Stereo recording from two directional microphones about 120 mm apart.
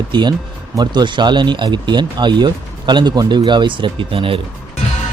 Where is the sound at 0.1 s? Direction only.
40° right (ahead or behind).